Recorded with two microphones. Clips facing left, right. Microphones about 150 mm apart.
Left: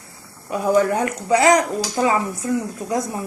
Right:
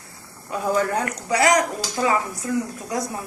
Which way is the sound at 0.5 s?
20° left (ahead or behind).